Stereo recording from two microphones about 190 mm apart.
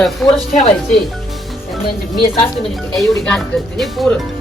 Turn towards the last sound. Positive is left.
turn(degrees=0)  # may be behind; listen again after turning